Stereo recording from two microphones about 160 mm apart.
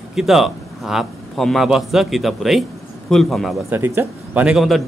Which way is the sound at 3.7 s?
15° right (ahead or behind).